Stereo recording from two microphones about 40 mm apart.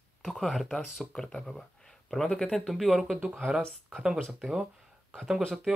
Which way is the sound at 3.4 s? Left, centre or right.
Centre.